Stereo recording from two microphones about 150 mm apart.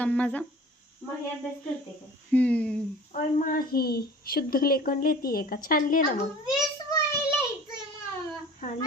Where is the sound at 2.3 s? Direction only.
10° left (ahead or behind).